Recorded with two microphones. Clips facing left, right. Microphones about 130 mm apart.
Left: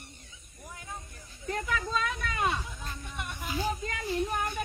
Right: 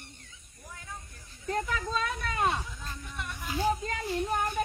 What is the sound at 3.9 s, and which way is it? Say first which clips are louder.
Child singing: right 1 dB; 35° right (ahead or behind).